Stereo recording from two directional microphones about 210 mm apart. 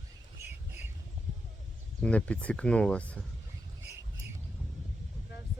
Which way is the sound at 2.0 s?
5° left (ahead or behind).